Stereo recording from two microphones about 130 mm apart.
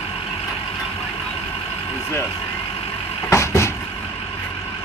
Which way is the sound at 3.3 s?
20° left (ahead or behind).